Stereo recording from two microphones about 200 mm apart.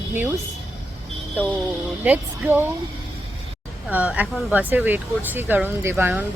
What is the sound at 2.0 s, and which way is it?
Speech, 10° right (ahead or behind).